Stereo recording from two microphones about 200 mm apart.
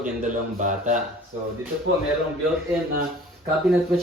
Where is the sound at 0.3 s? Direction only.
40° right (ahead or behind).